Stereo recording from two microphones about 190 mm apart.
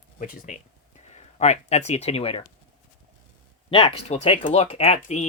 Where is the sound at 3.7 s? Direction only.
30° left (ahead or behind).